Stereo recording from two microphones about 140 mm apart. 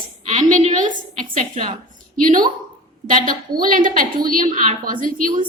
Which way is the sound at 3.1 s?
75° right (ahead or behind).